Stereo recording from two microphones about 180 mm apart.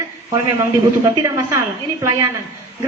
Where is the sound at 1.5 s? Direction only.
15° right (ahead or behind).